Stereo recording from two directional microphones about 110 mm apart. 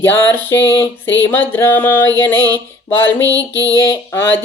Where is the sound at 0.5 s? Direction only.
30° left (ahead or behind).